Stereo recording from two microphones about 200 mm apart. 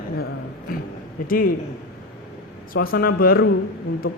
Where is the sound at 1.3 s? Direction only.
45° left (ahead or behind).